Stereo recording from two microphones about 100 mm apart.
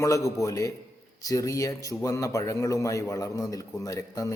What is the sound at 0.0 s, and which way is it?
Speech, 35° left (ahead or behind).